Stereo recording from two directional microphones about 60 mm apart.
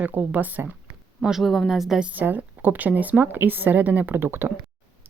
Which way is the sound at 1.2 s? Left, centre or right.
Centre.